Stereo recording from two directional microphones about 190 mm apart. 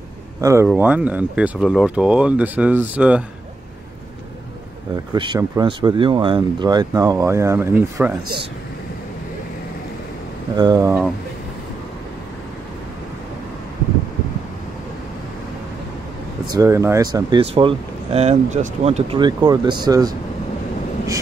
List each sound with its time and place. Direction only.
0.4 s speech: 15° right (ahead or behind)
4.9 s speech: 25° right (ahead or behind)
10.5 s speech: 20° right (ahead or behind)
16.5 s speech: 15° right (ahead or behind)